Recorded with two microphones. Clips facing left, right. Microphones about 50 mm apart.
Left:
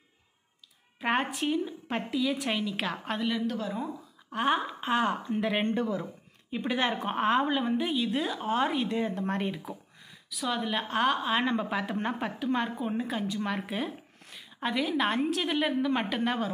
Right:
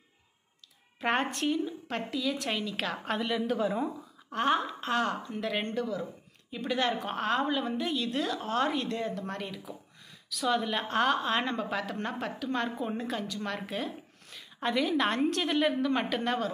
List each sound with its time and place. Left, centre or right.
1.0 s a woman's voice: centre
4.3 s a woman's voice: centre
9.1 s speech: left
10.3 s a woman's voice: centre